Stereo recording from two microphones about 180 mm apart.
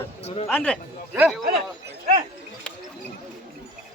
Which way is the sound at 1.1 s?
5° right (ahead or behind).